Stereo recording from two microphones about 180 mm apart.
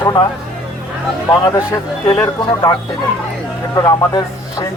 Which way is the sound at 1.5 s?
15° left (ahead or behind).